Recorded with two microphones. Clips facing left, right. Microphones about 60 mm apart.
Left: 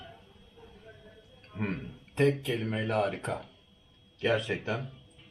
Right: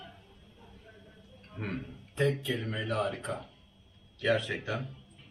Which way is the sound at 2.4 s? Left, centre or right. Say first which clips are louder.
Left 2 dB; left.